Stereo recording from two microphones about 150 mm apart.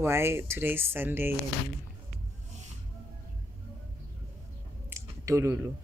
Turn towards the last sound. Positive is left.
turn(degrees=-20)  # may be behind; listen again after turning